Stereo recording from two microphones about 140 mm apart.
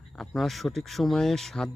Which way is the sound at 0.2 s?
Centre (ahead or behind).